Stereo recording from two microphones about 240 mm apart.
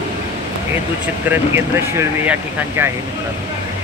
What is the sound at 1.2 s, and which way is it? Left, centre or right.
Speech, centre.